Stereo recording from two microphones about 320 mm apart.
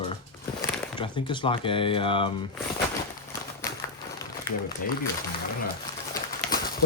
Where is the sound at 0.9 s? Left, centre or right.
Centre.